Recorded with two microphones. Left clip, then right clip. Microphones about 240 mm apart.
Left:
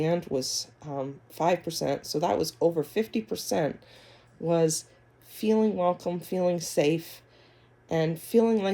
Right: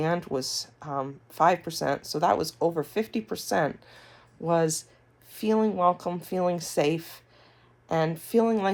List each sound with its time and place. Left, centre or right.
0.0 s speech: centre
0.9 s speech: right
1.3 s speech: centre
5.3 s a sound: centre
5.7 s speech: right
6.0 s speech: centre